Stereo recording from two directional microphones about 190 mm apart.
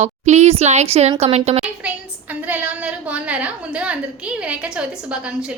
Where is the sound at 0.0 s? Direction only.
35° right (ahead or behind).